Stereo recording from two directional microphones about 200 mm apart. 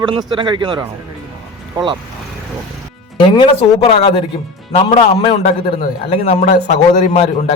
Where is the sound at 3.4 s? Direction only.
25° left (ahead or behind).